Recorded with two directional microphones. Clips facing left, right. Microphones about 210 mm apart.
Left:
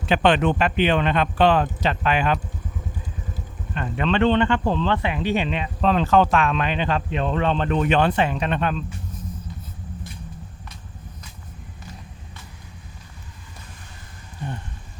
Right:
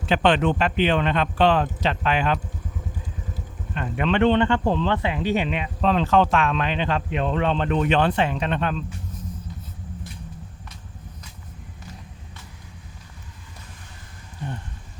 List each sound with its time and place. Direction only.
0.0 s speech: 10° left (ahead or behind)
3.9 s speech: 15° right (ahead or behind)
5.8 s speech: centre (ahead or behind)
7.1 s speech: 5° right (ahead or behind); by 8.8 s 10° left (ahead or behind)